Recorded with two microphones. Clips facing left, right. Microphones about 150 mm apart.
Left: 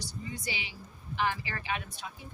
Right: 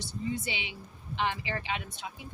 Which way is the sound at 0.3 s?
25° right (ahead or behind).